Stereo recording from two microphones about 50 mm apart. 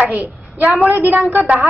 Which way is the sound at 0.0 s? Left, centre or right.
Right.